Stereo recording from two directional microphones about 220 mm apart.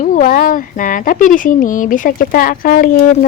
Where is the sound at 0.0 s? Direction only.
35° left (ahead or behind).